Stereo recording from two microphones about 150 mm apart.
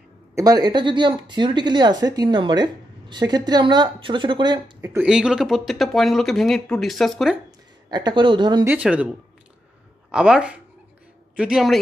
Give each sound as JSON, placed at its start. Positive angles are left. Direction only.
{"t": 0.3, "sound": "speech", "side_deg": -25}
{"t": 4.9, "sound": "speech", "side_deg": -5}
{"t": 7.9, "sound": "speech", "side_deg": -30}
{"t": 8.6, "sound": "speech", "side_deg": -10}
{"t": 10.1, "sound": "speech", "side_deg": -5}